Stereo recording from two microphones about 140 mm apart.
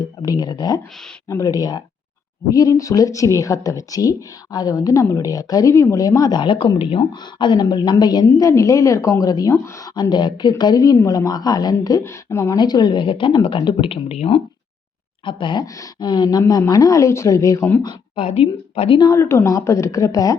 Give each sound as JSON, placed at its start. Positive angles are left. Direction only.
{"t": 0.2, "sound": "a woman's voice", "side_deg": 30}
{"t": 17.8, "sound": "a woman's voice", "side_deg": 40}